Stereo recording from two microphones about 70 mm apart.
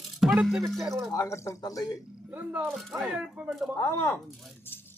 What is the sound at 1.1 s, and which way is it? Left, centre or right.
Speech, left.